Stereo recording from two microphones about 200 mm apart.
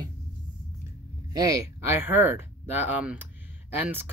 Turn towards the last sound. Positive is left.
turn(degrees=-10)  # may be behind; listen again after turning